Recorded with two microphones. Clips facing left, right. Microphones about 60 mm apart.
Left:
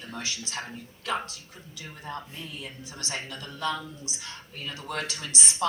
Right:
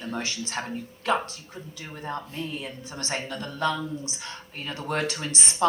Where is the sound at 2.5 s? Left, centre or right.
Right.